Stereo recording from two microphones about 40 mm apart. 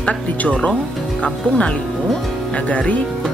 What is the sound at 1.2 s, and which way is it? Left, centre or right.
Speech, left.